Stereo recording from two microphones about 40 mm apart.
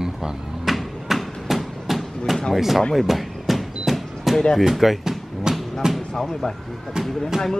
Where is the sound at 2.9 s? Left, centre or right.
Centre.